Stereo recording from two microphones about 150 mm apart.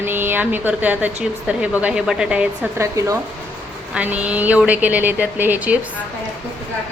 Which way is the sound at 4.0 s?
10° right (ahead or behind).